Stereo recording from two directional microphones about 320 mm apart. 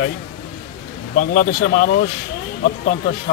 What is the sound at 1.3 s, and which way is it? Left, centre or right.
Speech, left.